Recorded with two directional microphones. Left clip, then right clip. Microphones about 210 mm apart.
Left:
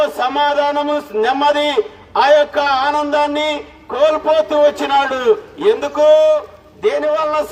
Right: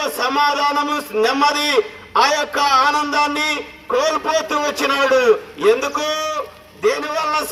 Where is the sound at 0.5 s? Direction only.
65° left (ahead or behind).